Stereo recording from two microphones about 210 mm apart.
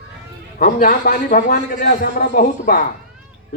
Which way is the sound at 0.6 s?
45° left (ahead or behind).